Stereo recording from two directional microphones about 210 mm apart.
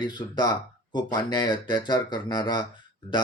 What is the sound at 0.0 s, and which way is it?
Speech, 20° left (ahead or behind).